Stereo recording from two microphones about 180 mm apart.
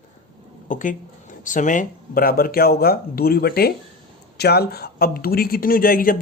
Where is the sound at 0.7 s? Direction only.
45° left (ahead or behind).